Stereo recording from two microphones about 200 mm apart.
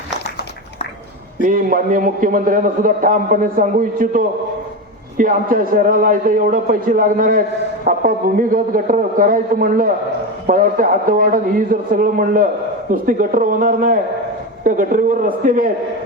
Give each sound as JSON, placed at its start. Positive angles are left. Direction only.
{"t": 1.4, "sound": "a man's voice", "side_deg": -45}